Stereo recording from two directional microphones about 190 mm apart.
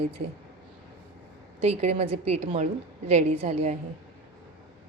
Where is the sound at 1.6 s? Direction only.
35° right (ahead or behind).